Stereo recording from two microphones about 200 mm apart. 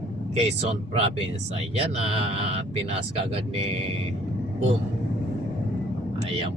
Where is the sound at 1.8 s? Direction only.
30° right (ahead or behind).